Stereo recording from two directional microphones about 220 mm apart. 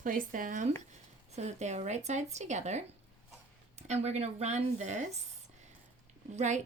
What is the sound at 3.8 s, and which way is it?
Speech, 30° right (ahead or behind).